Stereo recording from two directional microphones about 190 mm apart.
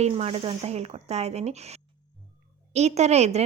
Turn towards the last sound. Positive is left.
turn(degrees=-35)  # may be behind; listen again after turning